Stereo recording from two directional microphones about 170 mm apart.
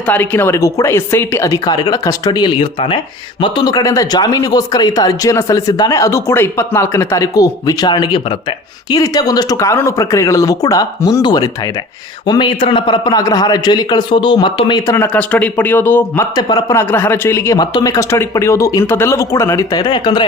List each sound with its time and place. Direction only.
0.0 s a man's voice: 10° left (ahead or behind)
14.9 s speech: 10° left (ahead or behind)
16.3 s speech: 25° left (ahead or behind)